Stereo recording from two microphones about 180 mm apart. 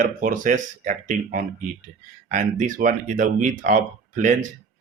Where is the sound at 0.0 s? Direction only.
45° right (ahead or behind).